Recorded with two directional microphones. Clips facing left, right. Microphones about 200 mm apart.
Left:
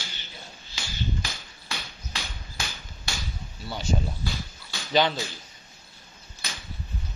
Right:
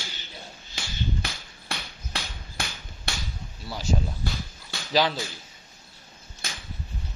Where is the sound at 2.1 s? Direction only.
60° right (ahead or behind).